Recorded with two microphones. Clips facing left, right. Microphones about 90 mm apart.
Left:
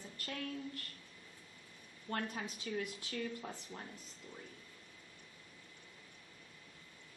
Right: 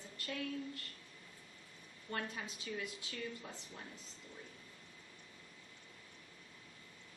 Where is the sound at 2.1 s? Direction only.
50° left (ahead or behind).